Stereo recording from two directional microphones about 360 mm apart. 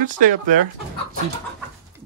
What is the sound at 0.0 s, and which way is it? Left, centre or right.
Speech, right.